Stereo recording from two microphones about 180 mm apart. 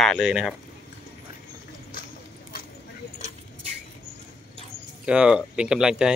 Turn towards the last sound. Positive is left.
turn(degrees=-5)  # may be behind; listen again after turning